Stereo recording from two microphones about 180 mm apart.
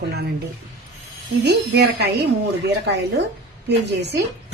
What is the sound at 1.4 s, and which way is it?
Speech, 70° right (ahead or behind).